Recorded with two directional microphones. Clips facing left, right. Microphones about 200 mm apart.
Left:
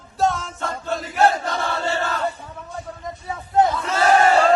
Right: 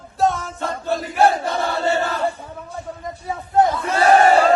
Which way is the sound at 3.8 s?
Centre (ahead or behind).